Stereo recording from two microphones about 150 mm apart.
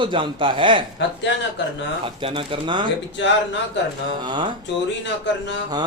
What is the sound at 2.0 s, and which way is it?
Speech, 35° right (ahead or behind).